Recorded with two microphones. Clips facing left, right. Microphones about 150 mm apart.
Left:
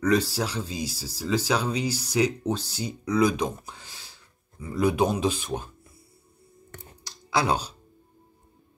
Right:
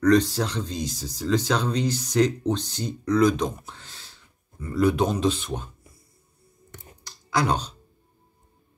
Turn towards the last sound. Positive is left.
turn(degrees=10)  # may be behind; listen again after turning